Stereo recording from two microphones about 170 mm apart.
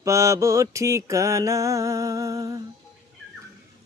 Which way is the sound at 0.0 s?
15° right (ahead or behind).